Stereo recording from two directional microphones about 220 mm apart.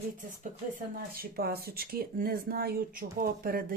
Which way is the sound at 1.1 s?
45° right (ahead or behind).